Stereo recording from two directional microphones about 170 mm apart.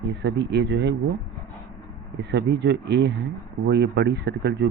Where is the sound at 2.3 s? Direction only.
90° right.